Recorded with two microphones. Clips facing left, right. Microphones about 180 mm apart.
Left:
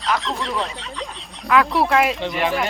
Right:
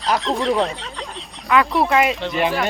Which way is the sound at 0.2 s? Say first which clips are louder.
Right 6 dB; centre (ahead or behind).